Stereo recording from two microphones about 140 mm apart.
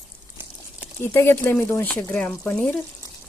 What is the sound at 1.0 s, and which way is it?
Speech, 15° left (ahead or behind).